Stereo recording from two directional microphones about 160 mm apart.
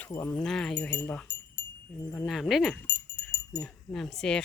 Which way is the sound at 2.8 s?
15° left (ahead or behind).